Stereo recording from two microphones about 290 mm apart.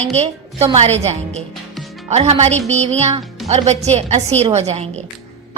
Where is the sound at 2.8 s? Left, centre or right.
Right.